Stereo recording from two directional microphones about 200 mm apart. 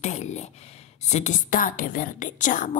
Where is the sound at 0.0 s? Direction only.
35° left (ahead or behind).